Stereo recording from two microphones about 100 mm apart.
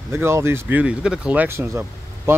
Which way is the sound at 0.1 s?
25° right (ahead or behind).